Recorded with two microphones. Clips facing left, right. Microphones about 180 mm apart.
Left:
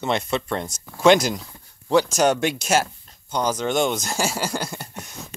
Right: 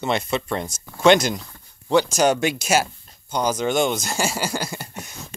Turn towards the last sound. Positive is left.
turn(degrees=0)  # may be behind; listen again after turning